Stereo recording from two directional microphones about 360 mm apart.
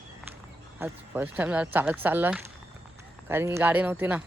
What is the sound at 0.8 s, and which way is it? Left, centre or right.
Speech, centre.